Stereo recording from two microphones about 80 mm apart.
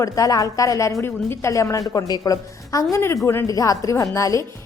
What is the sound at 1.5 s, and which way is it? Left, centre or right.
Speech, left.